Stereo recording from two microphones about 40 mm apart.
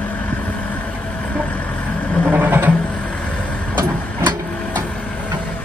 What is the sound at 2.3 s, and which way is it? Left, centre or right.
Vehicle, right.